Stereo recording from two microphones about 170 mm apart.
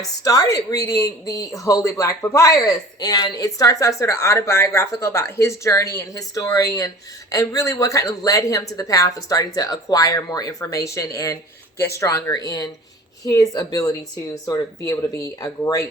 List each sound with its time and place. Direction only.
0.0 s speech: 20° left (ahead or behind)